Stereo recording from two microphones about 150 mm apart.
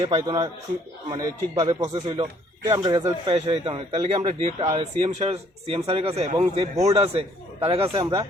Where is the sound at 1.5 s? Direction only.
30° right (ahead or behind).